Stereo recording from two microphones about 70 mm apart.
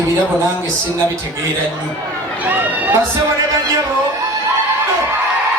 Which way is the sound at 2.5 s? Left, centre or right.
Right.